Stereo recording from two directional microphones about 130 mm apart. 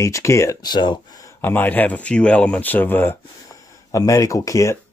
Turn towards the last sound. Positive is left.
turn(degrees=25)  # may be behind; listen again after turning